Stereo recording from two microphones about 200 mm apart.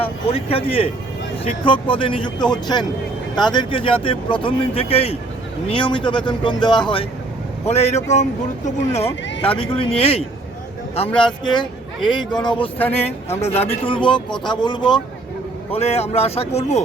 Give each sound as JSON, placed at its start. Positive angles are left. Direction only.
{"t": 0.0, "sound": "speech", "side_deg": 30}
{"t": 12.8, "sound": "speech", "side_deg": 10}
{"t": 13.8, "sound": "speech", "side_deg": 25}